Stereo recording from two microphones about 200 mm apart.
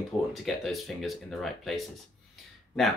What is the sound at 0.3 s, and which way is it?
Speech, centre (ahead or behind).